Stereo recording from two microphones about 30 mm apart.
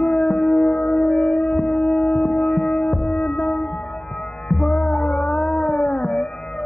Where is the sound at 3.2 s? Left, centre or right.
Centre.